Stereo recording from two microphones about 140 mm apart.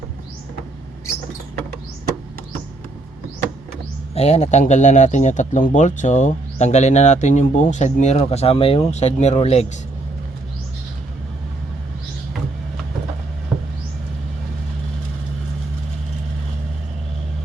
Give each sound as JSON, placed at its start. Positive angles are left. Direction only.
{"t": 4.1, "sound": "speech", "side_deg": 50}